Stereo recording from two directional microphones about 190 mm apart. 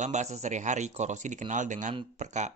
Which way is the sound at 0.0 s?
35° right (ahead or behind).